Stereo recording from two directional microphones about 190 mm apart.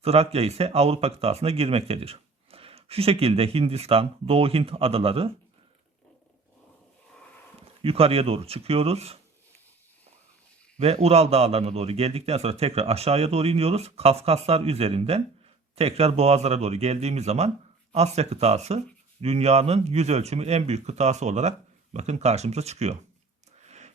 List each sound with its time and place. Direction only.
0.0 s speech: 35° right (ahead or behind)
7.8 s speech: 30° right (ahead or behind)
10.8 s speech: 35° right (ahead or behind)
23.6 s a sound: 35° right (ahead or behind)